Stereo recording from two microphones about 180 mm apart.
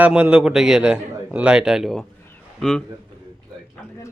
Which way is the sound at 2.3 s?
5° left (ahead or behind).